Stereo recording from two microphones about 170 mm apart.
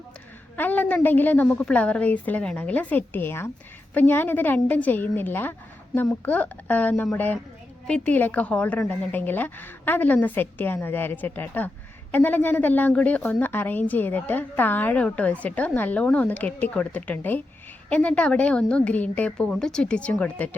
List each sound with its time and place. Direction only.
0.5 s a woman's voice: 10° left (ahead or behind)